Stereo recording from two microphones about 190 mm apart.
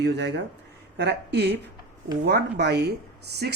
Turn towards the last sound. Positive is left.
turn(degrees=-60)  # may be behind; listen again after turning